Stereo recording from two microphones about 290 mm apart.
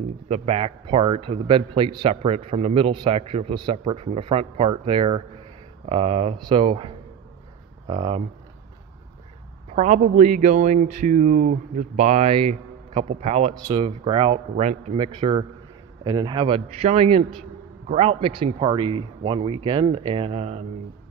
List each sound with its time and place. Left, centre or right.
0.3 s speech: right
9.7 s speech: right